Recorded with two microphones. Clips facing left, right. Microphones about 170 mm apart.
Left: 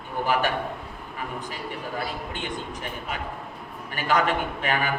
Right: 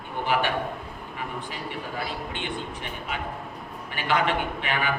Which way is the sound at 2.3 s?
40° left (ahead or behind).